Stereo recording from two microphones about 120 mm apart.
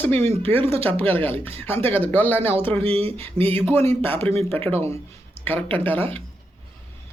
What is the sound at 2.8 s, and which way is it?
Speech, 55° right (ahead or behind).